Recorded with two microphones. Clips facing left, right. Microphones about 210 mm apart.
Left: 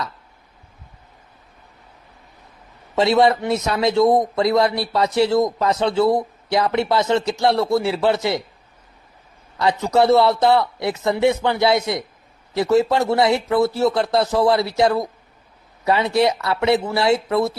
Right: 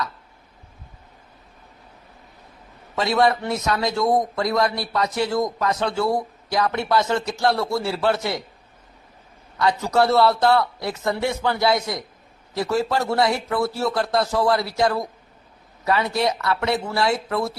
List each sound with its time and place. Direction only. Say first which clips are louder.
2.9 s a man's voice: left 4 dB; 25° left (ahead or behind)
9.8 s a man's voice: left 3 dB; 20° left (ahead or behind)